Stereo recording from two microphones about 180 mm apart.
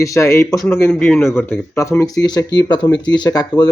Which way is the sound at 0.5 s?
Centre (ahead or behind).